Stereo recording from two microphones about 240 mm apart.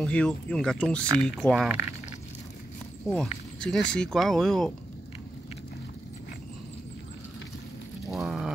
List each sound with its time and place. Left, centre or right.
0.0 s speech: centre
3.1 s speech: centre
8.1 s a sound: centre